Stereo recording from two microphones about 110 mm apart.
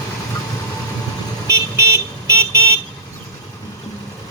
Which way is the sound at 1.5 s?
25° right (ahead or behind).